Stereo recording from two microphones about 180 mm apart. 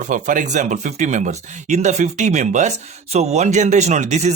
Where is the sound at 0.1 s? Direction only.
45° right (ahead or behind).